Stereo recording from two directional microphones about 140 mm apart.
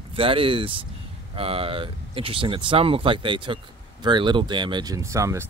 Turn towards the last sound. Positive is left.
turn(degrees=-20)  # may be behind; listen again after turning